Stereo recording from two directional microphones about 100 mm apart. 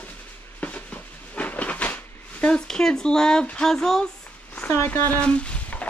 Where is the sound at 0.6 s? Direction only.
15° left (ahead or behind).